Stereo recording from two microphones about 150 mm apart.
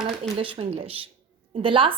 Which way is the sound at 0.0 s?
35° right (ahead or behind).